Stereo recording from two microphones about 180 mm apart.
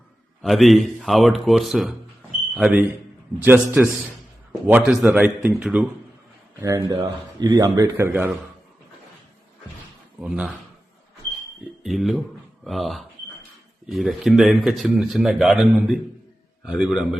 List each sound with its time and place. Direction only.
0.4 s a man's voice: centre (ahead or behind)
10.2 s speech: 5° right (ahead or behind)
11.8 s speech: centre (ahead or behind)